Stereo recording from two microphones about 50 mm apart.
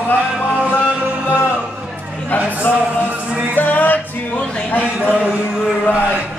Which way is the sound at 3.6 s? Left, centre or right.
Left.